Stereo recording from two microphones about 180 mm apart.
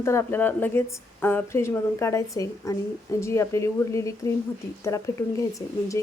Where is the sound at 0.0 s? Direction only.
15° left (ahead or behind).